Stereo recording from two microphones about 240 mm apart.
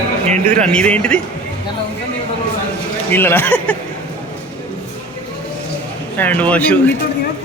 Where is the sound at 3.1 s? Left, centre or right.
Centre.